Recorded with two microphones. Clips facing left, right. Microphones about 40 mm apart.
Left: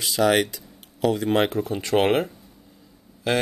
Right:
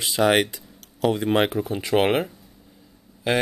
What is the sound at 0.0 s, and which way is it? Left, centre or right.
Speech, right.